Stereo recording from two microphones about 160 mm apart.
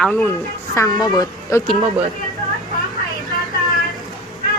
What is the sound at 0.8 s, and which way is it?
Speech, 25° left (ahead or behind).